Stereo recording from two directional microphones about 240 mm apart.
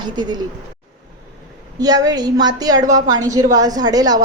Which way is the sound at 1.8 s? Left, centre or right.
Centre.